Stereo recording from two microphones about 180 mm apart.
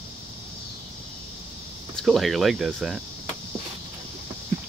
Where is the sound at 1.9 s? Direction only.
Centre (ahead or behind).